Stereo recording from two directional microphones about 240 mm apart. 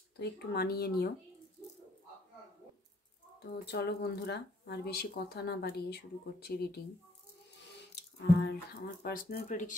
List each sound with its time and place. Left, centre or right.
0.2 s speech: left
3.3 s speech: left
7.9 s speech: left